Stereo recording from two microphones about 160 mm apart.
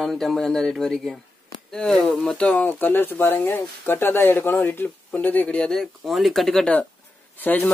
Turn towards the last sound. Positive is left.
turn(degrees=10)  # may be behind; listen again after turning